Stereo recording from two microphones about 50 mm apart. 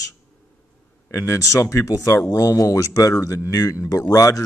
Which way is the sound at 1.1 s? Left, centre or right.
Left.